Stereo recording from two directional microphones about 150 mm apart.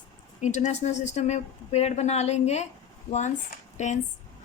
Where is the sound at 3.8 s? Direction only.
50° left (ahead or behind).